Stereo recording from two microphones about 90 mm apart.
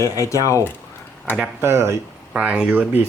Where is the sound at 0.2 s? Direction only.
35° left (ahead or behind).